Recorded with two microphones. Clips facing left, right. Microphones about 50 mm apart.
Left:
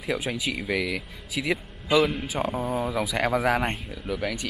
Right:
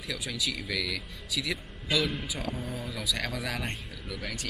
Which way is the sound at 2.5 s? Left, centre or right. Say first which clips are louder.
Left 10 dB; left.